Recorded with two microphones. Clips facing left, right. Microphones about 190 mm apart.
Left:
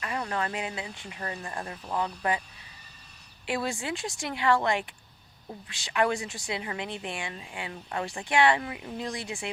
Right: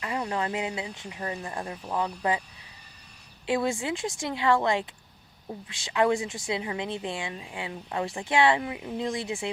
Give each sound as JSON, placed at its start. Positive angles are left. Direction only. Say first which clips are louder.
{"t": 0.0, "sound": "a woman's voice", "louder": "right 2 dB", "side_deg": -20}
{"t": 3.4, "sound": "a woman's voice", "louder": "right 4 dB", "side_deg": -20}